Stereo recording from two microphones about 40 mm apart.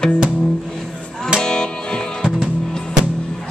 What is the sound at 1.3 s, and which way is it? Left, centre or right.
Music, centre.